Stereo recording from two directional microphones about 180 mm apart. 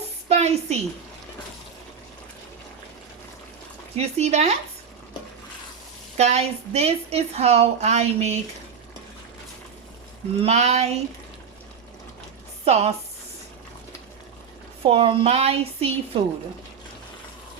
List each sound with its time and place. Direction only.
0.3 s a woman's voice: 35° right (ahead or behind)
3.9 s a woman's voice: 35° right (ahead or behind)
6.1 s a woman's voice: 35° right (ahead or behind)
10.4 s a woman's voice: 40° right (ahead or behind)
12.6 s a woman's voice: 35° right (ahead or behind)
14.8 s a woman's voice: 30° right (ahead or behind)